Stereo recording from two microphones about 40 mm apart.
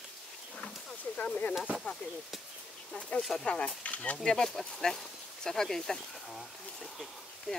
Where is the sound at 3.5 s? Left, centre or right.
Left.